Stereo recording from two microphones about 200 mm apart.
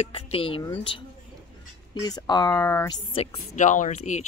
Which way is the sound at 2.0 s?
20° left (ahead or behind).